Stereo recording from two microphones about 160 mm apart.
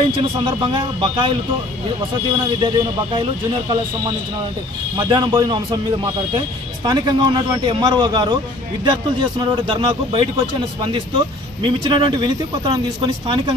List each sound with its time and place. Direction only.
0.4 s speech: 30° right (ahead or behind)
2.6 s speech: 30° right (ahead or behind)
4.9 s speech: 30° right (ahead or behind)
6.8 s speech: 25° right (ahead or behind)